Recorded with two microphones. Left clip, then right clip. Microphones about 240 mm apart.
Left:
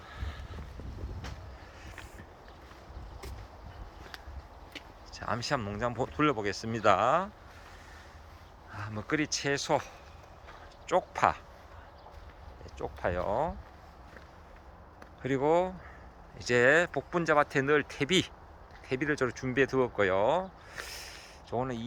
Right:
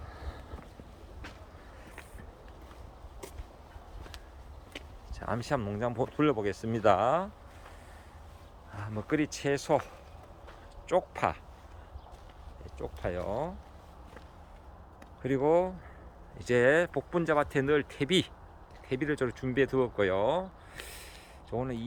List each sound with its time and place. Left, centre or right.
0.1 s a sound: right
4.7 s speech: centre
8.7 s speech: centre
12.8 s speech: centre
15.2 s speech: centre
20.7 s a sound: centre